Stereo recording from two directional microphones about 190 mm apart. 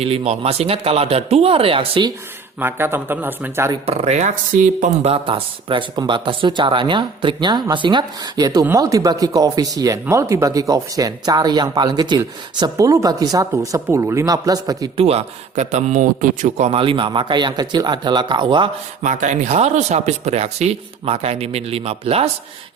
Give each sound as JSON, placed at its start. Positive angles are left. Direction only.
{"t": 0.0, "sound": "speech", "side_deg": -30}
{"t": 2.6, "sound": "speech", "side_deg": -10}
{"t": 3.8, "sound": "speech", "side_deg": -35}
{"t": 15.0, "sound": "speech", "side_deg": -35}
{"t": 19.0, "sound": "speech", "side_deg": -40}